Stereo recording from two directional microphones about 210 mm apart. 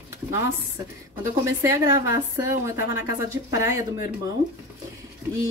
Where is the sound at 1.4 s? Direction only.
15° right (ahead or behind).